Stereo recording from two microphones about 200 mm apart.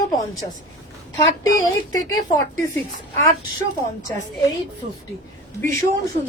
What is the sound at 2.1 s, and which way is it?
Speech, 15° left (ahead or behind).